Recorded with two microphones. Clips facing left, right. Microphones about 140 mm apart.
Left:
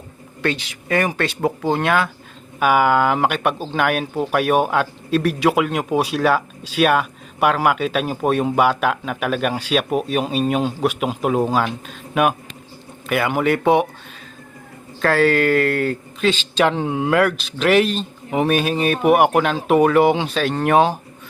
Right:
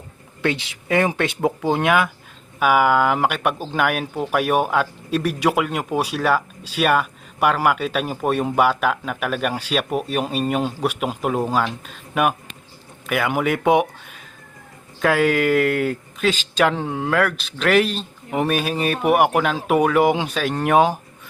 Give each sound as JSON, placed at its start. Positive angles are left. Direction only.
{"t": 0.4, "sound": "speech", "side_deg": -20}
{"t": 2.6, "sound": "speech", "side_deg": -5}
{"t": 15.0, "sound": "speech", "side_deg": -10}